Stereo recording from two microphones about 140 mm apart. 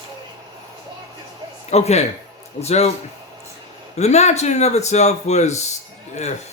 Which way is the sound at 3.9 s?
50° left (ahead or behind).